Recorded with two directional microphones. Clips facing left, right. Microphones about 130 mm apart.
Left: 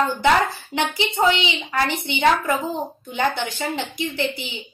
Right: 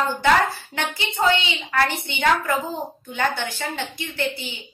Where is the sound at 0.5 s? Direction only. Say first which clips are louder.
Left 4 dB; 15° left (ahead or behind).